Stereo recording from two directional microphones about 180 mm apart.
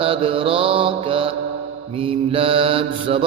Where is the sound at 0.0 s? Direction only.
30° right (ahead or behind).